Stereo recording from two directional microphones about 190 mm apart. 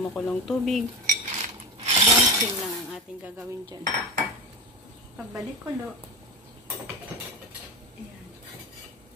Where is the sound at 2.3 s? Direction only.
20° right (ahead or behind).